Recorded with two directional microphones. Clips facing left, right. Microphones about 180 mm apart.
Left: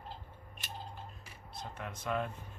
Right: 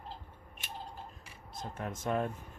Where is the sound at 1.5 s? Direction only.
45° right (ahead or behind).